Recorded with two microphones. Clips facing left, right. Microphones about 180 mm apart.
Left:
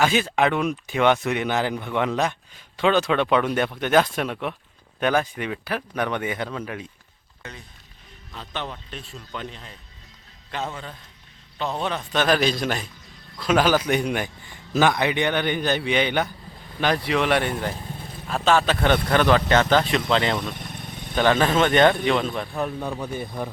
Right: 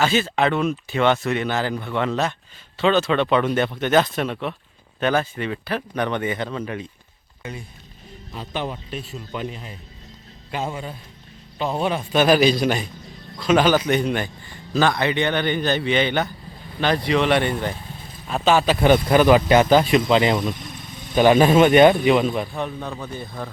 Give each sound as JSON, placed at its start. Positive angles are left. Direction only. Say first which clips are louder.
{"t": 0.0, "sound": "a man's voice", "louder": "right 1 dB", "side_deg": 10}
{"t": 8.3, "sound": "a man's voice", "louder": "right 5 dB", "side_deg": -10}
{"t": 20.6, "sound": "vehicle", "louder": "left 1 dB", "side_deg": 60}
{"t": 21.2, "sound": "a man's voice", "louder": "right 5 dB", "side_deg": -15}
{"t": 22.5, "sound": "speech", "louder": "left 1 dB", "side_deg": 5}
{"t": 22.9, "sound": "a man's voice", "louder": "left 2 dB", "side_deg": 15}